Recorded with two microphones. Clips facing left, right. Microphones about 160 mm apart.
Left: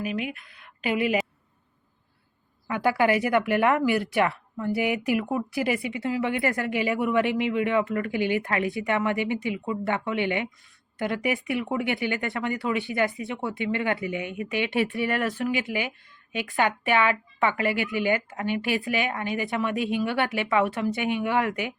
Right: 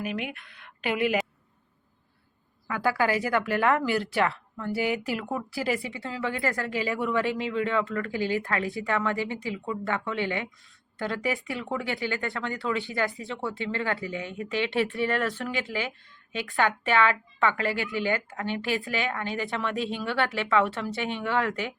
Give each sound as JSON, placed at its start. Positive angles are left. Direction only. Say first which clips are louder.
{"t": 0.0, "sound": "a woman's voice", "louder": "left 2 dB", "side_deg": 0}
{"t": 2.6, "sound": "a woman's voice", "louder": "left 3 dB", "side_deg": 20}